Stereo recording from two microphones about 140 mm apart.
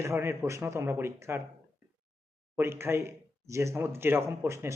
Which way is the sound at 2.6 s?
15° right (ahead or behind).